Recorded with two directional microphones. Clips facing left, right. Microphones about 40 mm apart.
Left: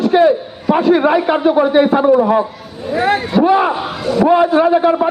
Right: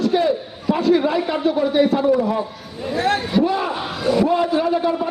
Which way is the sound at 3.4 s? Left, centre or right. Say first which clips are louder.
Left 10 dB; left.